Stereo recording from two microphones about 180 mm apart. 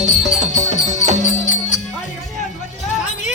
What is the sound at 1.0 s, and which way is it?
Music, 40° left (ahead or behind).